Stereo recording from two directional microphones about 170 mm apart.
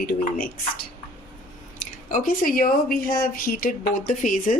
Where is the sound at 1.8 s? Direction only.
50° left (ahead or behind).